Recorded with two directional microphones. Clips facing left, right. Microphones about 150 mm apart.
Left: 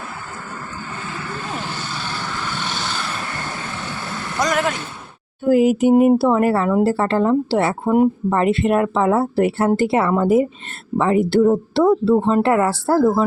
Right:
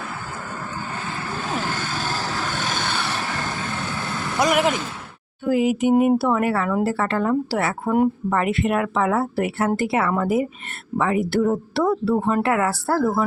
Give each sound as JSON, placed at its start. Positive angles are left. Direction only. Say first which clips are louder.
{"t": 1.8, "sound": "vehicle", "louder": "right 2 dB", "side_deg": -45}
{"t": 4.4, "sound": "speech", "louder": "right 1 dB", "side_deg": -10}
{"t": 5.5, "sound": "speech", "louder": "left 5 dB", "side_deg": 40}
{"t": 8.3, "sound": "speech", "louder": "left 4 dB", "side_deg": 30}